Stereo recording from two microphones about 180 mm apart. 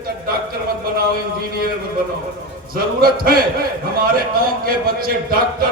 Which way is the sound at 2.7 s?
55° right (ahead or behind).